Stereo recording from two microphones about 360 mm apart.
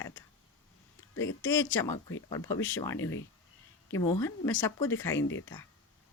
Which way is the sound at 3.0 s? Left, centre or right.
Left.